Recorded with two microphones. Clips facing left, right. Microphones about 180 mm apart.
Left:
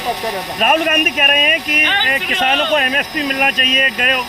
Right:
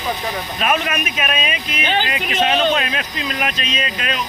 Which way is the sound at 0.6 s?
45° left (ahead or behind).